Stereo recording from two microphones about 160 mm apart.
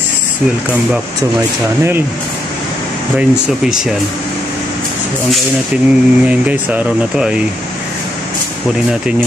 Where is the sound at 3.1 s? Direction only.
5° right (ahead or behind).